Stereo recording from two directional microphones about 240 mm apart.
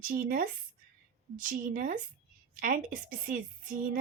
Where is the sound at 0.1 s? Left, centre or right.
Right.